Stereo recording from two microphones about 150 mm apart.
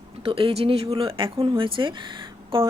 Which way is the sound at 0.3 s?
35° right (ahead or behind).